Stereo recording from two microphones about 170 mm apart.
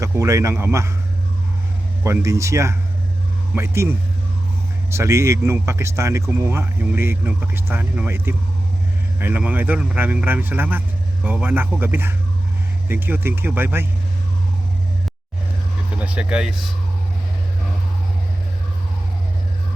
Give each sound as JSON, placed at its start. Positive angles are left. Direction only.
{"t": 0.0, "sound": "speech", "side_deg": -20}
{"t": 2.0, "sound": "speech", "side_deg": -15}
{"t": 16.0, "sound": "speech", "side_deg": -5}